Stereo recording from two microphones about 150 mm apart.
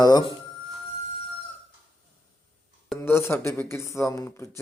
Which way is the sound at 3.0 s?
15° left (ahead or behind).